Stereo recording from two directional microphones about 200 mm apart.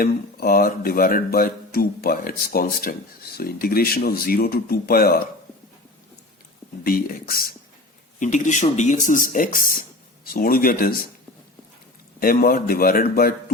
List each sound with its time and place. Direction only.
0.0 s speech: 45° left (ahead or behind)
6.8 s speech: 45° left (ahead or behind)
12.2 s speech: 45° left (ahead or behind)